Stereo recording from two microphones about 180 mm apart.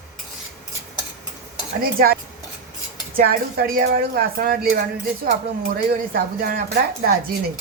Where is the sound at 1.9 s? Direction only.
55° right (ahead or behind).